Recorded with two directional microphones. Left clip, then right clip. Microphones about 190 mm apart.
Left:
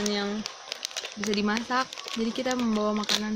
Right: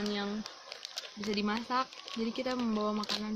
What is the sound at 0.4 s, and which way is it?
Crumpling, 40° left (ahead or behind).